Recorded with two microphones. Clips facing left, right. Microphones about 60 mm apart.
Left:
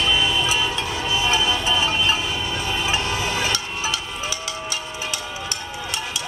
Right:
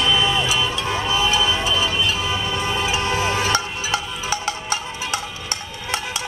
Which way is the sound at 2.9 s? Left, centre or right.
Right.